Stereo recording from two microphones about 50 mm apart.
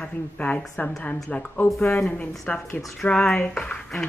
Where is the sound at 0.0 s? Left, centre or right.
Left.